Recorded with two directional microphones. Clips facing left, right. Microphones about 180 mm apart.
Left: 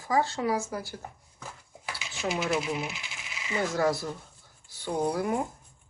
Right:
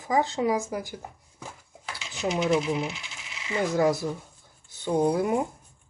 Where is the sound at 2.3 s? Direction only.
5° left (ahead or behind).